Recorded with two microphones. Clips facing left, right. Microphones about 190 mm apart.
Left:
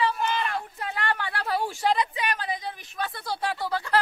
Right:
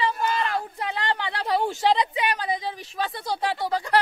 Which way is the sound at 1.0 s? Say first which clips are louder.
Even; 20° right (ahead or behind).